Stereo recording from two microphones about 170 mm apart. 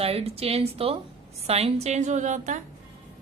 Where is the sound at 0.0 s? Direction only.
35° right (ahead or behind).